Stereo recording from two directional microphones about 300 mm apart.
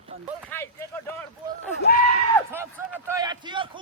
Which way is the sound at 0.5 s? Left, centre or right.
Centre.